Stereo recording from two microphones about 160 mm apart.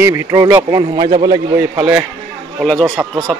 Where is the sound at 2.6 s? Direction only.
5° left (ahead or behind).